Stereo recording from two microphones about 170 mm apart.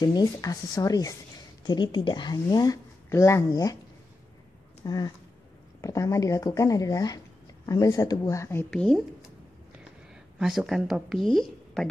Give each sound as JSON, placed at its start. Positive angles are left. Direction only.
{"t": 0.0, "sound": "a woman's voice", "side_deg": 20}
{"t": 4.8, "sound": "a woman's voice", "side_deg": 25}
{"t": 8.6, "sound": "speech", "side_deg": 5}
{"t": 10.4, "sound": "speech", "side_deg": 0}